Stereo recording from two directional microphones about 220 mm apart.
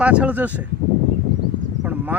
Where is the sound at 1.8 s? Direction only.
10° right (ahead or behind).